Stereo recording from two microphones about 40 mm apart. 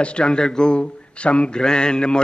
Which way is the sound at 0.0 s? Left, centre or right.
Left.